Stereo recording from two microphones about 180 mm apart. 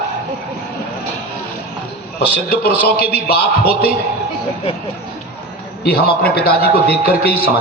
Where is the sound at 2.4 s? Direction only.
60° left (ahead or behind).